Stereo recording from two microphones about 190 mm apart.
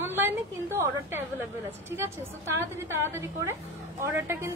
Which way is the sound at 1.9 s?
15° right (ahead or behind).